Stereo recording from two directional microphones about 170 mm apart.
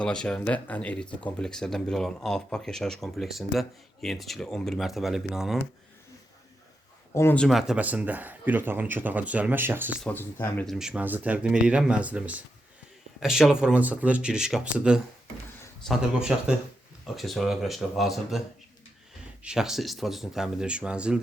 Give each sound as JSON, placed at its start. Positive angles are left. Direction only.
{"t": 0.0, "sound": "speech", "side_deg": 5}
{"t": 7.1, "sound": "speech", "side_deg": 15}
{"t": 7.3, "sound": "speech", "side_deg": 0}
{"t": 10.0, "sound": "speech", "side_deg": 10}
{"t": 10.7, "sound": "speech", "side_deg": -5}